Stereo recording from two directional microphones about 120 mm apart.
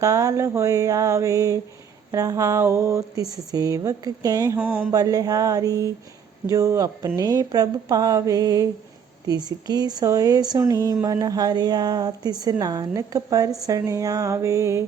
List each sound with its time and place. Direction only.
0.0 s speech: 25° right (ahead or behind)
4.5 s a sound: 10° right (ahead or behind)
4.9 s speech: 30° right (ahead or behind)